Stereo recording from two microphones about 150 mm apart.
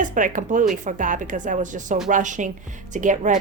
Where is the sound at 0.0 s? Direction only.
60° right (ahead or behind).